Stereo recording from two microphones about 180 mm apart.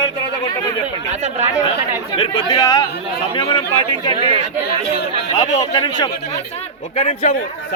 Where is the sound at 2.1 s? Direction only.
25° left (ahead or behind).